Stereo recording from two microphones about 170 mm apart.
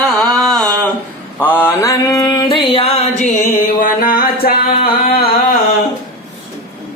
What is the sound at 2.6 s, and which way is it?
Music, 35° left (ahead or behind).